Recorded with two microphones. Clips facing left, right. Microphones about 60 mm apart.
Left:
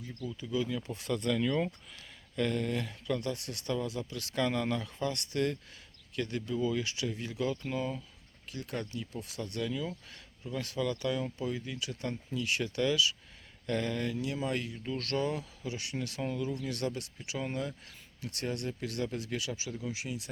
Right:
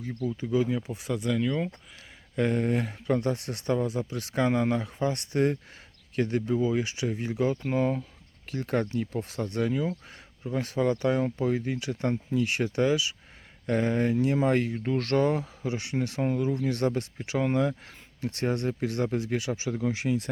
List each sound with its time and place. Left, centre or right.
0.3 s speech: right
0.8 s speech: centre
2.3 s speech: right
19.7 s speech: right